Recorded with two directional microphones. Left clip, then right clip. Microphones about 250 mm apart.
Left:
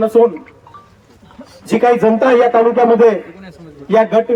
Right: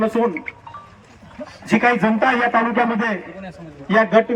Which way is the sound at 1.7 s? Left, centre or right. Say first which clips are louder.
Left 6 dB; left.